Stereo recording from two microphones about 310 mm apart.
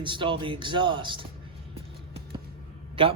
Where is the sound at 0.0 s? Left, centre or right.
Centre.